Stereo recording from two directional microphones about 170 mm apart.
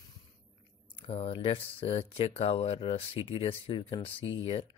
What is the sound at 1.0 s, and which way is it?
Speech, 35° left (ahead or behind).